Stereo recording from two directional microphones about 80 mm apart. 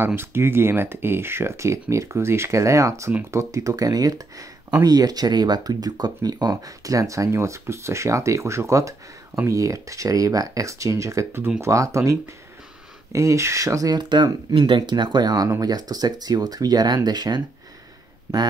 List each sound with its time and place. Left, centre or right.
0.0 s speech: right